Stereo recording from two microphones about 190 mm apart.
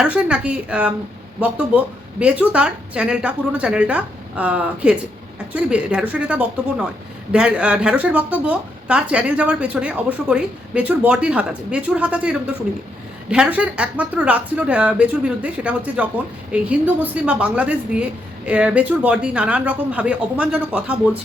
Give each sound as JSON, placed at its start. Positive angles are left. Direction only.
{"t": 0.0, "sound": "speech", "side_deg": -5}